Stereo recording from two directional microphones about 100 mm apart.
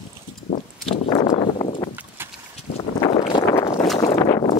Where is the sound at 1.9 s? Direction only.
20° right (ahead or behind).